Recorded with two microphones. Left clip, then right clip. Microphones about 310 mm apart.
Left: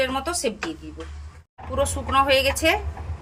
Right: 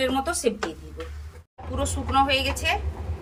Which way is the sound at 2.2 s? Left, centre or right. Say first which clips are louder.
Left 5 dB; centre.